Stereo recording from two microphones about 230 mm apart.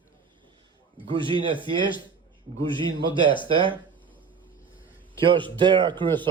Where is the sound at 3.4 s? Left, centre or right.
Right.